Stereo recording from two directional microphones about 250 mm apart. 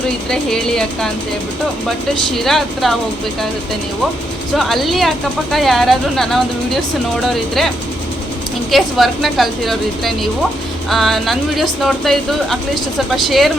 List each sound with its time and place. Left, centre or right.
0.3 s speech: centre
2.3 s speech: centre
4.5 s speech: centre
8.7 s speech: centre